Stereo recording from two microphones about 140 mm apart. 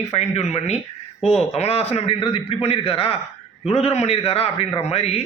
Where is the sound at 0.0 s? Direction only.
50° left (ahead or behind).